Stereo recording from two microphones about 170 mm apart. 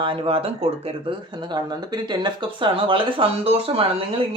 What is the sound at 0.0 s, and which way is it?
Speech, 30° right (ahead or behind).